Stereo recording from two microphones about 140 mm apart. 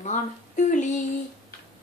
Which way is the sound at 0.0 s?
60° left (ahead or behind).